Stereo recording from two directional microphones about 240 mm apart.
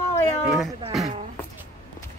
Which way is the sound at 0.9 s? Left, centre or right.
Centre.